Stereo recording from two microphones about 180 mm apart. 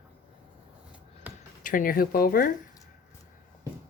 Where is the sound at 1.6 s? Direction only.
50° left (ahead or behind).